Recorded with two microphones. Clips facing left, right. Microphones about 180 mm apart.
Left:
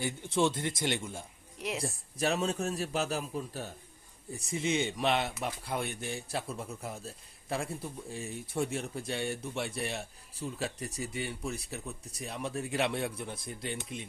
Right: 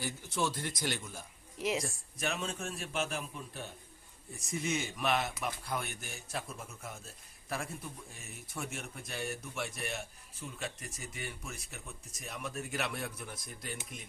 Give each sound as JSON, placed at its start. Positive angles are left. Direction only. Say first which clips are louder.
{"t": 0.0, "sound": "speech", "louder": "left 6 dB", "side_deg": 25}
{"t": 1.5, "sound": "a woman's voice", "louder": "right 3 dB", "side_deg": 0}
{"t": 2.1, "sound": "speech", "louder": "left 7 dB", "side_deg": 35}